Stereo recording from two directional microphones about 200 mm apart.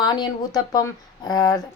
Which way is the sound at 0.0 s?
20° left (ahead or behind).